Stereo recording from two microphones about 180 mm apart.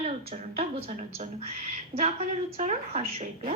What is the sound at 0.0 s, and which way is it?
A woman's voice, 35° right (ahead or behind).